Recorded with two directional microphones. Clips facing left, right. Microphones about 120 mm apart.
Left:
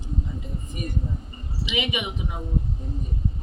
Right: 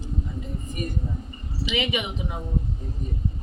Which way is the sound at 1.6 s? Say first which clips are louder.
Right 2 dB; 20° left (ahead or behind).